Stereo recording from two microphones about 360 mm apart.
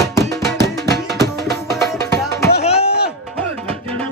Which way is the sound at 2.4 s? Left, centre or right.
Left.